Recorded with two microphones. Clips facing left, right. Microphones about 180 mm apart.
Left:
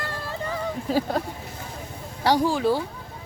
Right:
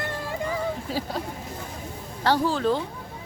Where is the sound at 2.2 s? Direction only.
15° left (ahead or behind).